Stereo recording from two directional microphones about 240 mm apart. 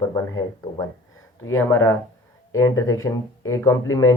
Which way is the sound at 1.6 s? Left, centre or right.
Centre.